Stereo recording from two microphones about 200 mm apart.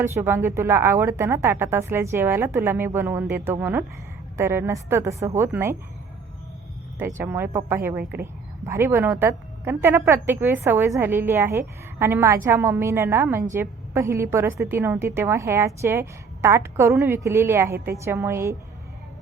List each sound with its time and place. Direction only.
0.1 s speech: 10° right (ahead or behind)
7.2 s speech: 10° right (ahead or behind)